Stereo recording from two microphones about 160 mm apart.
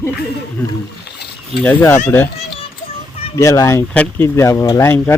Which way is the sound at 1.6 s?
10° left (ahead or behind).